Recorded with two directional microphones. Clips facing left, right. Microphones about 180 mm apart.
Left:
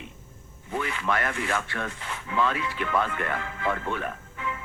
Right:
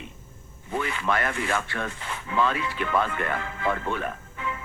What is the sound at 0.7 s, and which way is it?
Speech, 30° right (ahead or behind).